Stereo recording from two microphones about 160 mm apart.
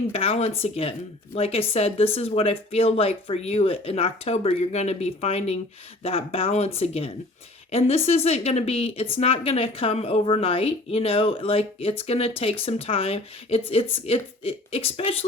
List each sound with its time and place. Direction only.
0.1 s a woman's voice: 35° left (ahead or behind)